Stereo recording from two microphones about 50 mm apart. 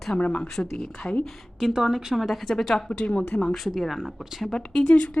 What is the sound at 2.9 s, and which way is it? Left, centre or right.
Speech, left.